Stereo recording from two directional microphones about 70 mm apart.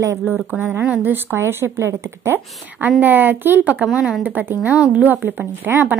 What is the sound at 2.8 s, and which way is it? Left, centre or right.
A woman's voice, right.